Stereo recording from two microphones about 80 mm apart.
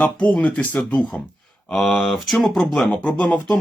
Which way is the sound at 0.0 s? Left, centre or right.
Centre.